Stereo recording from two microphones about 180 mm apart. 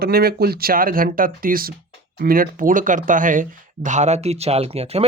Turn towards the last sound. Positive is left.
turn(degrees=-35)  # may be behind; listen again after turning